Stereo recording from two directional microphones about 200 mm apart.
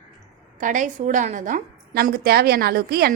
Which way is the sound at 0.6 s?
40° right (ahead or behind).